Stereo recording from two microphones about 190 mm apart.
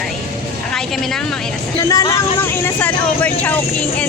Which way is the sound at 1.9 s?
20° left (ahead or behind).